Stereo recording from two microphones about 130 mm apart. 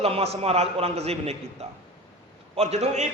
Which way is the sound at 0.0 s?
50° right (ahead or behind).